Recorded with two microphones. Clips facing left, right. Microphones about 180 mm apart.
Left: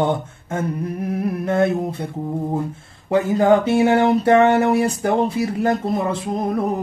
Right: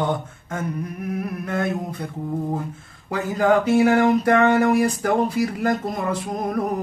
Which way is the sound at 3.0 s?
25° left (ahead or behind).